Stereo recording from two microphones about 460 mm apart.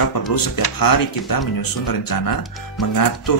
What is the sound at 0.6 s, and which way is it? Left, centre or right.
Speech, left.